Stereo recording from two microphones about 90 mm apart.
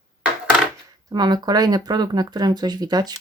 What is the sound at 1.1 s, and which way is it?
Speech, 50° right (ahead or behind).